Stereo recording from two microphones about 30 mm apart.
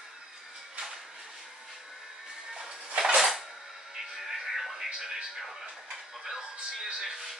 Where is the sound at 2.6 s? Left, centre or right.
Right.